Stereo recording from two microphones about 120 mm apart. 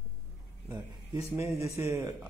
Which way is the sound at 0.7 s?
25° right (ahead or behind).